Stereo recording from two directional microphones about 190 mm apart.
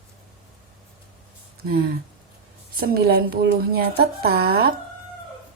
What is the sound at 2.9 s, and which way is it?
A woman's voice, 55° right (ahead or behind).